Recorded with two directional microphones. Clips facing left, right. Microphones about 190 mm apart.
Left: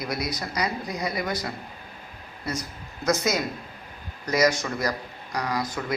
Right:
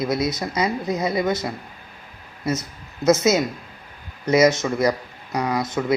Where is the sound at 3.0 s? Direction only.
25° right (ahead or behind).